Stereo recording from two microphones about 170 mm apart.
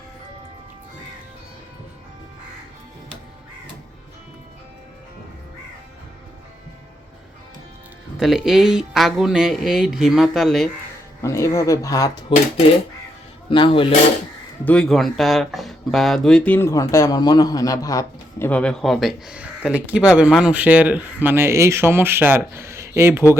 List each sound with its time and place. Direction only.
8.2 s speech: centre (ahead or behind)
11.2 s speech: 15° left (ahead or behind)
13.5 s speech: 30° left (ahead or behind)
14.6 s speech: 5° left (ahead or behind); by 23.2 s 15° right (ahead or behind)